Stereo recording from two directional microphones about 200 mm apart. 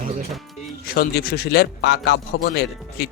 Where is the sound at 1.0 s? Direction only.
50° left (ahead or behind).